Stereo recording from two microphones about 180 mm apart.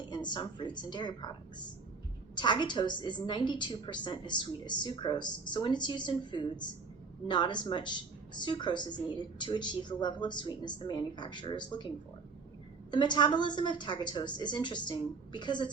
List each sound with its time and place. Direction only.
0.1 s a woman's voice: 25° left (ahead or behind)
12.9 s a woman's voice: 25° left (ahead or behind)